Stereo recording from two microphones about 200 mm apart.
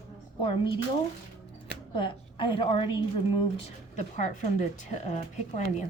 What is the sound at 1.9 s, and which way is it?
A woman's voice, 25° left (ahead or behind).